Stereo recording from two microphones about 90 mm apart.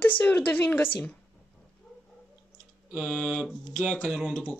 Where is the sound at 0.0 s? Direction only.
20° left (ahead or behind).